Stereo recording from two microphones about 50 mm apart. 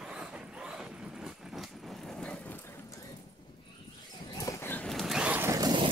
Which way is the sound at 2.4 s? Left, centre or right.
Left.